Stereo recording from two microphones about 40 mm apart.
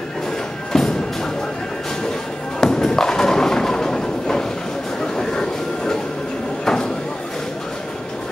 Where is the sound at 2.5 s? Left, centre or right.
Centre.